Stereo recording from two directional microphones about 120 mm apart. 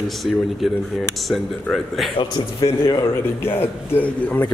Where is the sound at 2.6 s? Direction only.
25° left (ahead or behind).